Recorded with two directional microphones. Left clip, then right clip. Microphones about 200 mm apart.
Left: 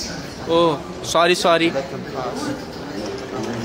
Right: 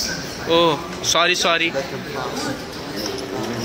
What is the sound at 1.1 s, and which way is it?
Speech, 30° left (ahead or behind).